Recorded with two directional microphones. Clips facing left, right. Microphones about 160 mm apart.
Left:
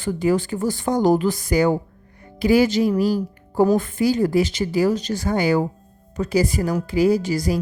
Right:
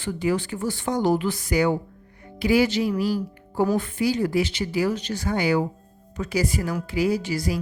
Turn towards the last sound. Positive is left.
turn(degrees=40)  # may be behind; listen again after turning